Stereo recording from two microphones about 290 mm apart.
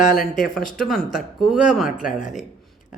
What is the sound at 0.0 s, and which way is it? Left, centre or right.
Speech, left.